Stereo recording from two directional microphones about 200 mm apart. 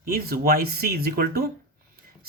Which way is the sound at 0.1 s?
50° right (ahead or behind).